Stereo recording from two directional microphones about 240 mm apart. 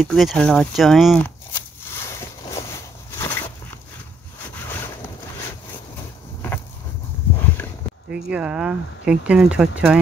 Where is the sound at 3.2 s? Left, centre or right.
Centre.